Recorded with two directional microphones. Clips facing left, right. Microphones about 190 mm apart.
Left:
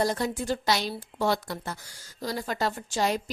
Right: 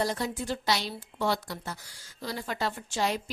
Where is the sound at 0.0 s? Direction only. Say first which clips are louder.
Left 3 dB; 50° left (ahead or behind).